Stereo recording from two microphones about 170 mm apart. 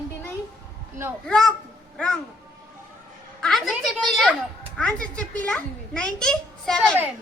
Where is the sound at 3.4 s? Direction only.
Centre (ahead or behind).